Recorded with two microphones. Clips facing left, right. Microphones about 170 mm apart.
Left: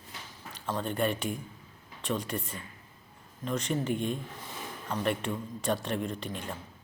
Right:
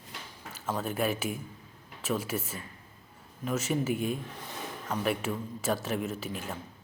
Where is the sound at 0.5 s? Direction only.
5° right (ahead or behind).